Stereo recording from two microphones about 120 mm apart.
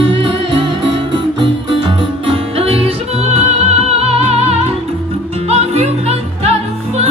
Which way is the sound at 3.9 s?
55° right (ahead or behind).